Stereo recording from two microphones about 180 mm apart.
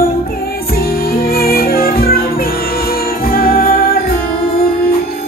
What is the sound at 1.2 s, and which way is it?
Music, 55° left (ahead or behind).